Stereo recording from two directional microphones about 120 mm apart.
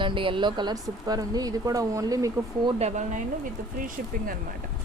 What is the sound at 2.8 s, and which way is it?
Speech, 90° right.